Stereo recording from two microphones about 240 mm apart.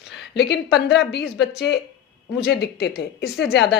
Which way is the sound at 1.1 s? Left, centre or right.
Left.